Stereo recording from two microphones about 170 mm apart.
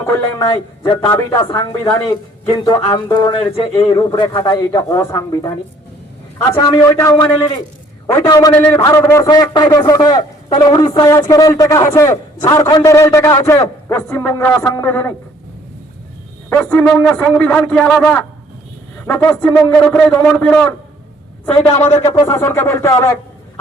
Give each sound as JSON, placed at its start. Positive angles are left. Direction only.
{"t": 0.0, "sound": "a man's voice", "side_deg": 20}
{"t": 16.5, "sound": "a man's voice", "side_deg": 10}
{"t": 21.8, "sound": "a man's voice", "side_deg": 15}